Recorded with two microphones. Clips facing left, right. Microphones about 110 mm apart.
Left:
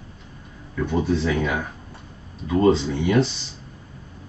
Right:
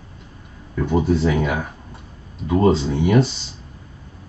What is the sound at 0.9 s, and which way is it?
Speech, 15° right (ahead or behind).